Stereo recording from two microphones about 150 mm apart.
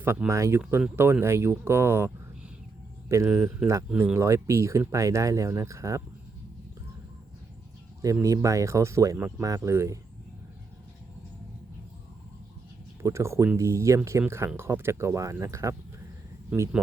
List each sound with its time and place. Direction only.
0.0 s speech: 15° right (ahead or behind)
8.0 s speech: 20° right (ahead or behind)
13.0 s speech: 20° right (ahead or behind)